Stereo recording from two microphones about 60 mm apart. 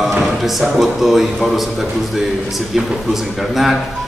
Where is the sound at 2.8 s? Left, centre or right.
Centre.